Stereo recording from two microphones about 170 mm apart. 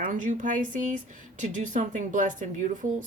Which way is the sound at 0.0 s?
50° right (ahead or behind).